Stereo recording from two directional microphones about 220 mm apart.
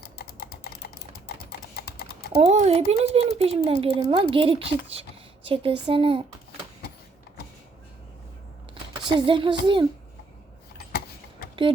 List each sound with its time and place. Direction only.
0.2 s typing: 45° left (ahead or behind)
2.4 s speech: 30° right (ahead or behind)
8.7 s speech: 20° right (ahead or behind)
10.8 s a sound: 45° left (ahead or behind)